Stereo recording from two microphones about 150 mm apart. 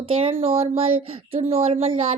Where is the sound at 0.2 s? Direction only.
40° right (ahead or behind).